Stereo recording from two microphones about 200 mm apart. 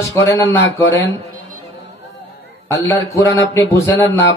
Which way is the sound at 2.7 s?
15° left (ahead or behind).